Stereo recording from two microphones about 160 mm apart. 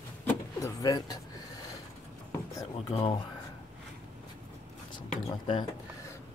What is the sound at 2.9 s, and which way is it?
Speech, 40° left (ahead or behind).